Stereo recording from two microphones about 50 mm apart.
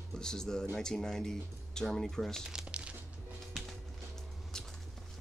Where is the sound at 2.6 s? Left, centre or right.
Right.